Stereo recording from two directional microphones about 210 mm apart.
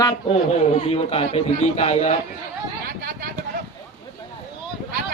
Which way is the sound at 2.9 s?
45° right (ahead or behind).